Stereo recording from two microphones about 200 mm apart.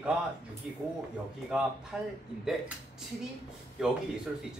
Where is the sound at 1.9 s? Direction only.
5° right (ahead or behind).